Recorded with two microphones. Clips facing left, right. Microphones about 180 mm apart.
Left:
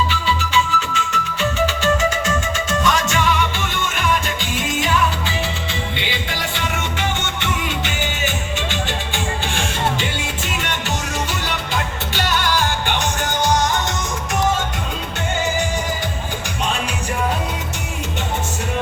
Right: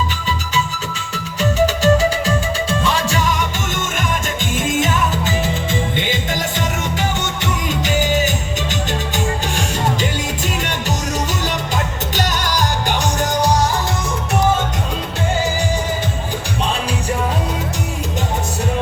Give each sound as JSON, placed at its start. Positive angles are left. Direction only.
{"t": 0.1, "sound": "music", "side_deg": -40}
{"t": 7.4, "sound": "music", "side_deg": -40}
{"t": 12.1, "sound": "music", "side_deg": -40}